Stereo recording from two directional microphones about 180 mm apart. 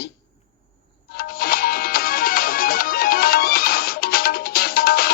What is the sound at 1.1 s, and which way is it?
Music, 55° left (ahead or behind).